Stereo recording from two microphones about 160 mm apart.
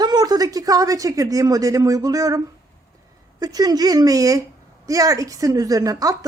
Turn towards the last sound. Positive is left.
turn(degrees=-20)  # may be behind; listen again after turning